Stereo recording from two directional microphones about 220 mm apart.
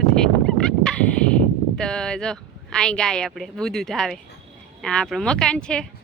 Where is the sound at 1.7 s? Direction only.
5° left (ahead or behind).